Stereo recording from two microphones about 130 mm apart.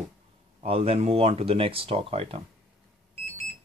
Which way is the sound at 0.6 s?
50° right (ahead or behind).